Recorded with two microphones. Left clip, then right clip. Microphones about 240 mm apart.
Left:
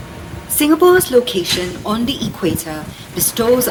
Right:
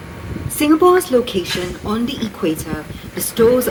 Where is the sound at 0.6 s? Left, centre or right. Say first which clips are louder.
Left 1 dB; left.